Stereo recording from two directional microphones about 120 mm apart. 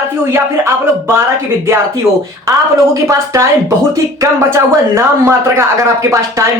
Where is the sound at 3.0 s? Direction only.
25° right (ahead or behind).